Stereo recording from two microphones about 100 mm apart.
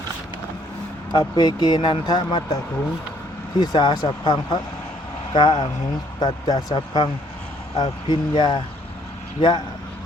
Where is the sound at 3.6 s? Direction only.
50° left (ahead or behind).